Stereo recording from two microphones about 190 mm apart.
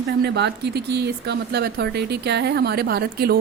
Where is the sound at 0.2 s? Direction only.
65° right (ahead or behind).